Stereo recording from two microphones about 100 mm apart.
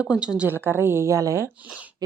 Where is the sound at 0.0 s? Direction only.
10° right (ahead or behind); by 1.5 s 30° right (ahead or behind).